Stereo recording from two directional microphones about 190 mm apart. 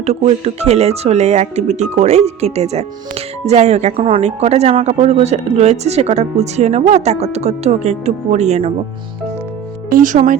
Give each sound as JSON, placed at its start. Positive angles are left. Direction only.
{"t": 0.0, "sound": "speech", "side_deg": -35}
{"t": 9.9, "sound": "speech", "side_deg": -45}